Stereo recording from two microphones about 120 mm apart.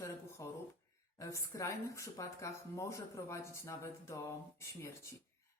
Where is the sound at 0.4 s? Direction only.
25° left (ahead or behind).